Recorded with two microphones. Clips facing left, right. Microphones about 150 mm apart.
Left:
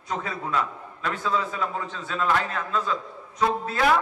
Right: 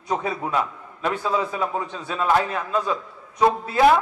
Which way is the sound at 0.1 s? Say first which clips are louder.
Right 4 dB; 20° right (ahead or behind).